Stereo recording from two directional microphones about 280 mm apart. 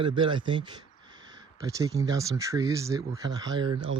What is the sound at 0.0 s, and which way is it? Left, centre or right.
Speech, centre.